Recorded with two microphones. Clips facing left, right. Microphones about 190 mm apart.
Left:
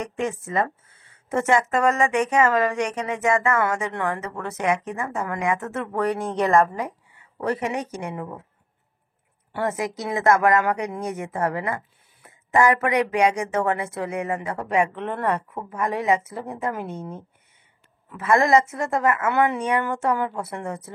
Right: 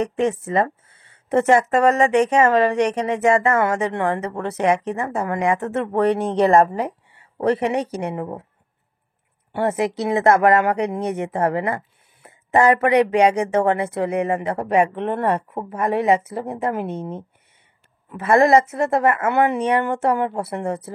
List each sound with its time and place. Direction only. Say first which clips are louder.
0.5 s speech: right 4 dB; 30° right (ahead or behind)
9.5 s a woman's voice: right 5 dB; 25° right (ahead or behind)
18.1 s speech: right 4 dB; 30° right (ahead or behind)
19.2 s speech: right 3 dB; 60° right (ahead or behind)
20.0 s speech: right 4 dB; 30° right (ahead or behind)